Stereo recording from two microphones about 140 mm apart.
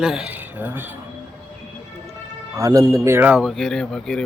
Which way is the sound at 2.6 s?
25° right (ahead or behind).